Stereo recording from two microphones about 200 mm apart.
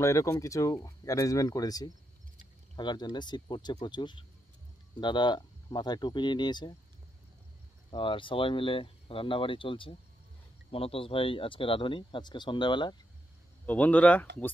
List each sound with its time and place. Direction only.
0.0 s speech: 15° left (ahead or behind)
7.9 s speech: 25° left (ahead or behind)
13.7 s speech: 10° left (ahead or behind)